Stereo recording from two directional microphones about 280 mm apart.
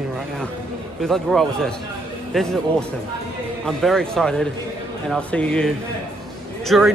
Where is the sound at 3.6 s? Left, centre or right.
Centre.